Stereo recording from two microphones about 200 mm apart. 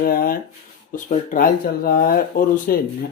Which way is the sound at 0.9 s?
40° left (ahead or behind).